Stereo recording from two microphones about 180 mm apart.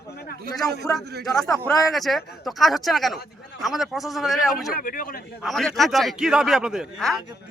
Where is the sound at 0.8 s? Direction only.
Centre (ahead or behind).